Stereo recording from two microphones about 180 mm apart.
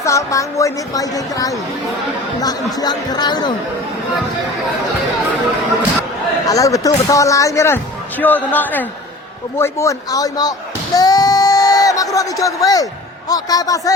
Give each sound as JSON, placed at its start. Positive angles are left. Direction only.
{"t": 0.0, "sound": "speech", "side_deg": 15}
{"t": 6.5, "sound": "speech", "side_deg": 20}
{"t": 10.9, "sound": "a sound", "side_deg": 20}